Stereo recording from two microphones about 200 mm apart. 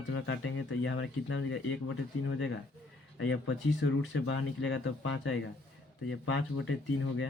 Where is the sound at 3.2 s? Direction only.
65° left (ahead or behind).